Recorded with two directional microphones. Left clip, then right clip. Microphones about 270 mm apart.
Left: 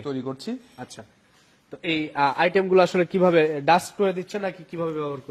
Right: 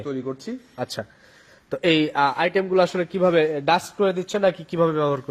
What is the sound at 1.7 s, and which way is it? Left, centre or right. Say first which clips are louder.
Speech: right 7 dB; right.